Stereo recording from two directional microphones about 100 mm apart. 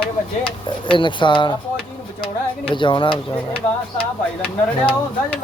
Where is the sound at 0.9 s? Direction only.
55° left (ahead or behind).